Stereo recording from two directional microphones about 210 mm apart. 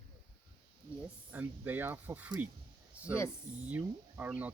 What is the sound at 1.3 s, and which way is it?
Speech, 10° right (ahead or behind).